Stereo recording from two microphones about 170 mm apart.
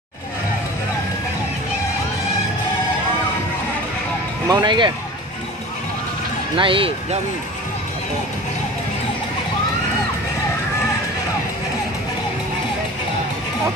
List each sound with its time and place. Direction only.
4.5 s speech: 25° right (ahead or behind)
6.5 s speech: 30° right (ahead or behind)